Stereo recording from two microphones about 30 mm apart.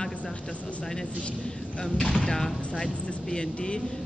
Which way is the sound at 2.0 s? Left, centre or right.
Centre.